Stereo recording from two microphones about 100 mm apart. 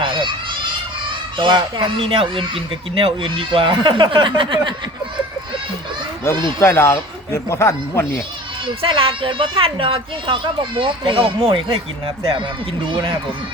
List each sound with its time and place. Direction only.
0.0 s a child's voice: 55° right (ahead or behind)
6.3 s speech: 30° left (ahead or behind)
8.6 s a woman's voice: 60° right (ahead or behind)